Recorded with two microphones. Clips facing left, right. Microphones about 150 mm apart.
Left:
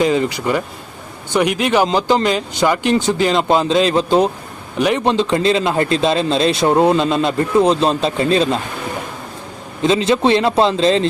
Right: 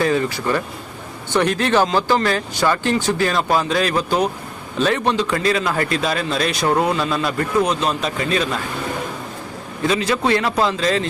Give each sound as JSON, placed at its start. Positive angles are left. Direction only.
{"t": 0.0, "sound": "speech", "side_deg": 20}
{"t": 9.8, "sound": "speech", "side_deg": 25}